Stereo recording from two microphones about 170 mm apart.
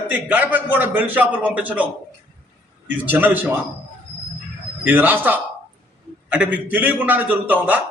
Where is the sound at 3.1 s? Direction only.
10° right (ahead or behind).